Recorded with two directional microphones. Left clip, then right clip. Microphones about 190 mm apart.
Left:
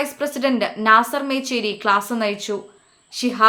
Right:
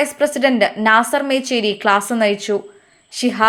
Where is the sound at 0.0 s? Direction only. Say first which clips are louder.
Right 6 dB; 20° right (ahead or behind).